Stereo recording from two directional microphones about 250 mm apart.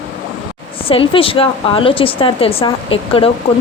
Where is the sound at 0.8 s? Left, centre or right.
Left.